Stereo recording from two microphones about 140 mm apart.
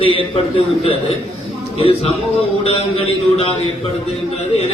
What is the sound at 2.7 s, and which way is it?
Speech, 45° left (ahead or behind).